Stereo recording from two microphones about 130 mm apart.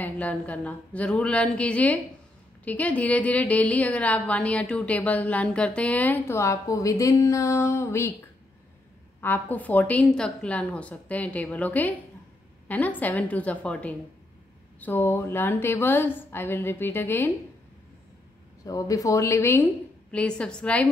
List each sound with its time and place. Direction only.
0.0 s a woman's voice: 10° left (ahead or behind)
9.2 s a woman's voice: 15° left (ahead or behind)
18.7 s speech: 25° left (ahead or behind)
20.1 s a woman's voice: 10° left (ahead or behind)